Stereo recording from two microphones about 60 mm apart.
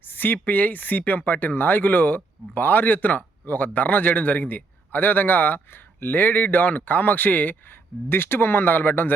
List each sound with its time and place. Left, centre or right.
0.1 s speech: left
8.1 s speech: left